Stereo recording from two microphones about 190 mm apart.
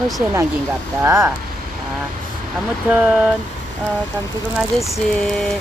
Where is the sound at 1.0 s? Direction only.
15° right (ahead or behind).